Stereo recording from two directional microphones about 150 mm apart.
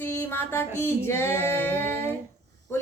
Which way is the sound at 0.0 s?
15° left (ahead or behind).